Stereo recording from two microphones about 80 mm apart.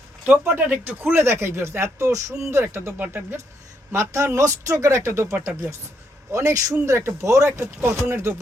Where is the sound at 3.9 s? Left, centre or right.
Right.